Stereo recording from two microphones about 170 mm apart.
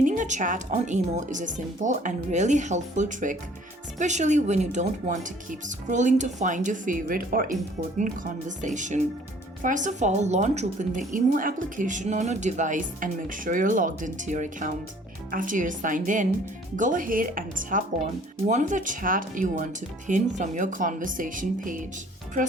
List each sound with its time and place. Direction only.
0.0 s a woman's voice: 50° right (ahead or behind)